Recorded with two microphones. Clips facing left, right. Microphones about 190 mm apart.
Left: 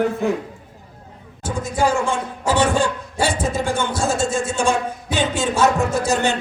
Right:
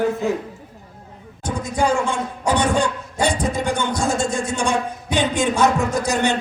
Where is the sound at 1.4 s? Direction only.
5° left (ahead or behind).